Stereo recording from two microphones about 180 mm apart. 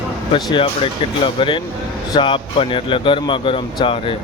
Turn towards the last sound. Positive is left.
turn(degrees=30)  # may be behind; listen again after turning